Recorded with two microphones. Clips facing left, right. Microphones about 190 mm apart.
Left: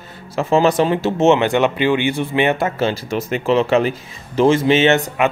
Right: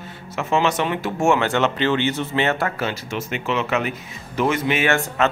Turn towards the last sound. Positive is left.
turn(degrees=20)  # may be behind; listen again after turning